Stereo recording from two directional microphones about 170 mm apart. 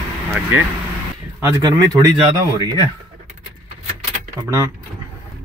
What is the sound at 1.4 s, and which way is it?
Speech, 15° right (ahead or behind).